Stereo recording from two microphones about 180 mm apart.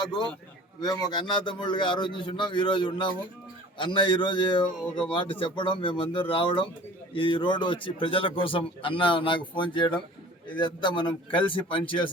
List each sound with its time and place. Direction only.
0.0 s a man's voice: 25° left (ahead or behind)